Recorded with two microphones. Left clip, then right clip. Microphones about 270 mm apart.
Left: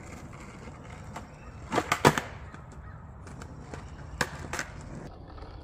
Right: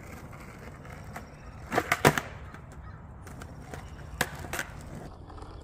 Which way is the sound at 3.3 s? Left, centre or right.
Right.